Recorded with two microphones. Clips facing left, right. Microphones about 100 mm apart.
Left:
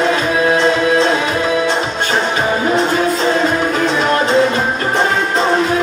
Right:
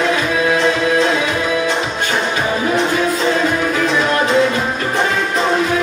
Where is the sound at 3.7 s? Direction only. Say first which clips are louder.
Left 1 dB; 30° left (ahead or behind).